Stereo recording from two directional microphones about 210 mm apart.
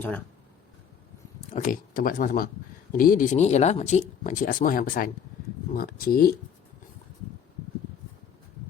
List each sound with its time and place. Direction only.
1.5 s speech: 40° left (ahead or behind)